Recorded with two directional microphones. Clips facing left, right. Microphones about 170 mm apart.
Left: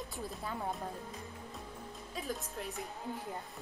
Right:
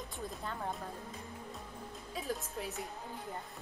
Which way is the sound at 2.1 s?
Centre (ahead or behind).